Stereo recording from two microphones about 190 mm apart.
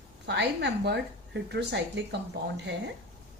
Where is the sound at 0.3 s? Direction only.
60° right (ahead or behind).